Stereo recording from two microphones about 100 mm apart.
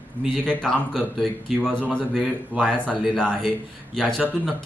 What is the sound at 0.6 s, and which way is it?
Speech, 5° left (ahead or behind).